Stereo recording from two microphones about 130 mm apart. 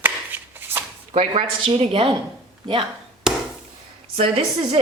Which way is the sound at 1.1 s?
50° right (ahead or behind).